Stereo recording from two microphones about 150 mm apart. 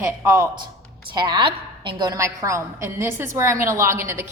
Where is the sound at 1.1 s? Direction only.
30° right (ahead or behind).